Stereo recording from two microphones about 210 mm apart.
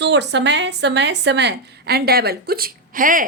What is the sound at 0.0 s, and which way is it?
A woman's voice, 55° right (ahead or behind).